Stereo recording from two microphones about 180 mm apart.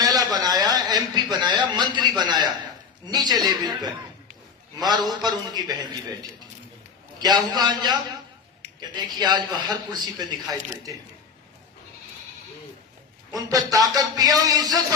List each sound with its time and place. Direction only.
0.0 s a sound: 20° right (ahead or behind)
3.1 s speech: 20° right (ahead or behind)
7.2 s speech: 20° right (ahead or behind)
13.3 s speech: 20° right (ahead or behind)